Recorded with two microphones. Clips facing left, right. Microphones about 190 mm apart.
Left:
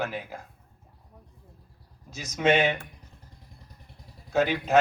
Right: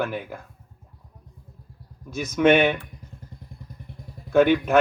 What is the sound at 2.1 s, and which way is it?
Speech, 55° right (ahead or behind).